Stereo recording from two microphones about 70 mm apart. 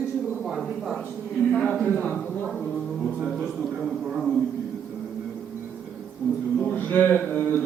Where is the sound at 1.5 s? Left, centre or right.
Centre.